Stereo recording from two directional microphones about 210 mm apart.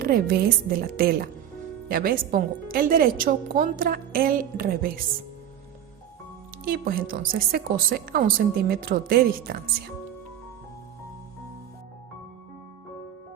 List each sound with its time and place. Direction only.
0.0 s a woman's voice: 45° right (ahead or behind)
6.7 s a woman's voice: 45° right (ahead or behind)